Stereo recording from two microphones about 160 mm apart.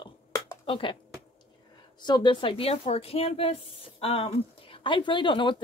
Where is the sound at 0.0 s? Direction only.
25° left (ahead or behind).